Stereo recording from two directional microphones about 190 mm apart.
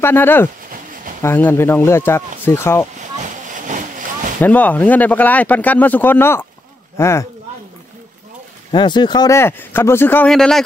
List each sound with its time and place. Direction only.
0.0 s speech: 10° left (ahead or behind)
3.0 s a sound: 40° right (ahead or behind)
4.4 s speech: 10° left (ahead or behind)
8.7 s speech: 25° left (ahead or behind); by 10.6 s 5° left (ahead or behind)